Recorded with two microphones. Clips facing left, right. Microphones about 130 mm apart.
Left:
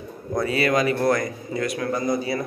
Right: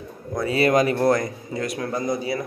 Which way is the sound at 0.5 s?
35° right (ahead or behind).